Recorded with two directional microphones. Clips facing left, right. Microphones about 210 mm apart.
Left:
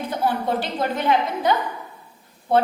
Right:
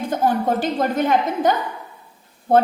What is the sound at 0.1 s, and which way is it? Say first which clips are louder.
A woman's voice: right 4 dB; 45° right (ahead or behind).